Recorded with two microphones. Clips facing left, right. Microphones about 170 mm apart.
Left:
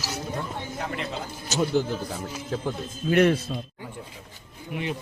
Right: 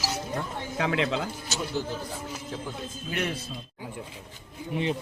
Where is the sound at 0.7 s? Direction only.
90° right.